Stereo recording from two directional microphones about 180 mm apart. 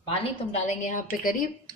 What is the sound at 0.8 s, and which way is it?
Speech, 45° left (ahead or behind).